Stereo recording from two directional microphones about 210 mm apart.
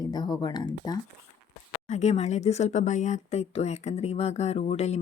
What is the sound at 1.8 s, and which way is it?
Speech, 35° left (ahead or behind).